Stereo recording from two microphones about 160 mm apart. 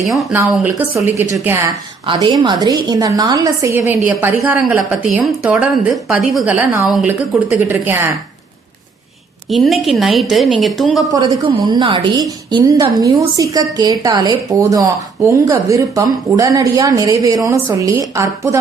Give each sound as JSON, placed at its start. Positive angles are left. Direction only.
{"t": 0.1, "sound": "a woman's voice", "side_deg": 0}
{"t": 1.2, "sound": "speech", "side_deg": -15}
{"t": 2.0, "sound": "a woman's voice", "side_deg": -30}
{"t": 9.5, "sound": "a woman's voice", "side_deg": 0}
{"t": 11.1, "sound": "a woman's voice", "side_deg": -25}